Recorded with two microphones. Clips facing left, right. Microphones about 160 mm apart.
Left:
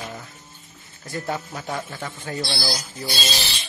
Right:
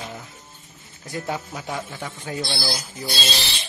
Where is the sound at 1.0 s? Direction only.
15° right (ahead or behind).